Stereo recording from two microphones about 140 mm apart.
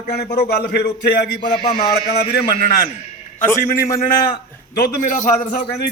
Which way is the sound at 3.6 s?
85° left.